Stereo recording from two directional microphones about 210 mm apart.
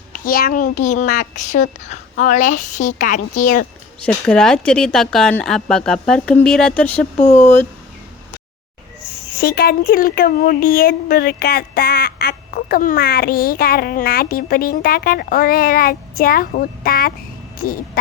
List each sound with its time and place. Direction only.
0.1 s a woman's voice: 40° left (ahead or behind)
4.0 s speech: 5° left (ahead or behind)
7.2 s a woman's voice: 35° left (ahead or behind)
7.4 s speech: 10° left (ahead or behind)
9.4 s speech: 45° left (ahead or behind)